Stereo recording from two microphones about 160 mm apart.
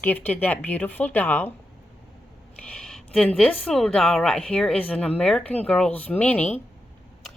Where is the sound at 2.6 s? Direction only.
5° left (ahead or behind).